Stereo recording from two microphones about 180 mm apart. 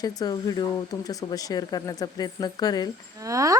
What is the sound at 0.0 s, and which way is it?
Speech, 20° left (ahead or behind).